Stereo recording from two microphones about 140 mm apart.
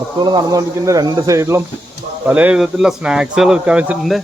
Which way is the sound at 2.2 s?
10° right (ahead or behind).